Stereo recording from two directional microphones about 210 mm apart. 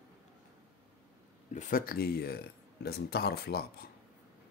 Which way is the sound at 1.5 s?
40° left (ahead or behind).